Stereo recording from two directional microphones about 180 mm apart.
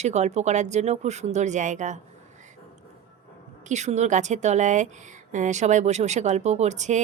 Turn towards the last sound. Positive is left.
turn(degrees=-40)  # may be behind; listen again after turning